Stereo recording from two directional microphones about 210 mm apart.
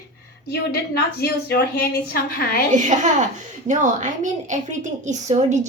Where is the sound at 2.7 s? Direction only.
35° right (ahead or behind).